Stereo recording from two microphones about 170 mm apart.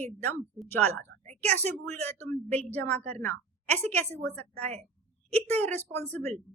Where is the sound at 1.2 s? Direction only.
40° right (ahead or behind).